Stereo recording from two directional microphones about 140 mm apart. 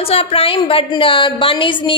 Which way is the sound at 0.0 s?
45° left (ahead or behind).